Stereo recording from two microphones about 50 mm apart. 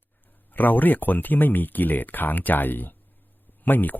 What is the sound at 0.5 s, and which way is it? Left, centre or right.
Speech, left.